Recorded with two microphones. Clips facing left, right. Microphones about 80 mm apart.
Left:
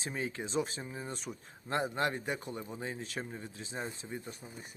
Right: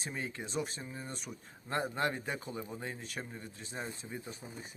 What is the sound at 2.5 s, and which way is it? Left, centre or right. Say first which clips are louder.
Speech: left 1 dB; centre.